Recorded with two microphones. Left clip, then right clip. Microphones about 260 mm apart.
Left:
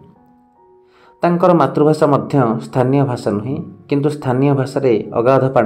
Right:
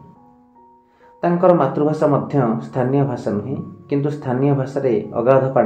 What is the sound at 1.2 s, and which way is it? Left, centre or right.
Speech, left.